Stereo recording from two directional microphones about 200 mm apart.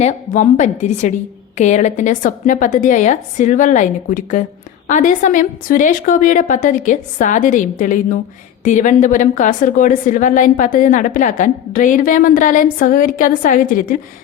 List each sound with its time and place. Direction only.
0.0 s a woman's voice: 35° left (ahead or behind)